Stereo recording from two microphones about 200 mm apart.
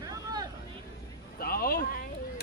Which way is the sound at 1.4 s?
50° left (ahead or behind).